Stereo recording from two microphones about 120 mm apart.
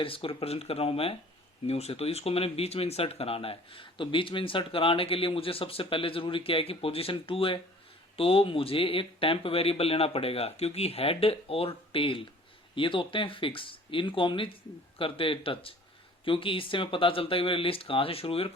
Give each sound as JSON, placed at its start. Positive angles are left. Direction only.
{"t": 0.0, "sound": "speech", "side_deg": 50}